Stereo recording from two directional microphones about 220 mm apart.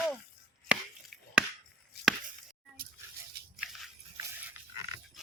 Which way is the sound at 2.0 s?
45° left (ahead or behind).